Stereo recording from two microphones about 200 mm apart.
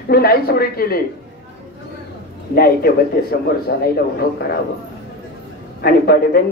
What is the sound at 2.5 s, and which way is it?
Speech, 50° left (ahead or behind).